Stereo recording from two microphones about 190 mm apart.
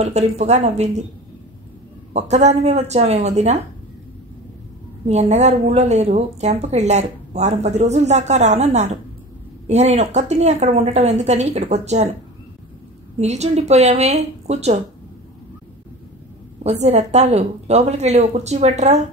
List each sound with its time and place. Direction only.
0.0 s a woman's voice: 35° right (ahead or behind)
2.1 s a woman's voice: 35° right (ahead or behind)
5.0 s a woman's voice: 35° right (ahead or behind)
13.2 s a woman's voice: 35° right (ahead or behind)
16.6 s a woman's voice: 35° right (ahead or behind)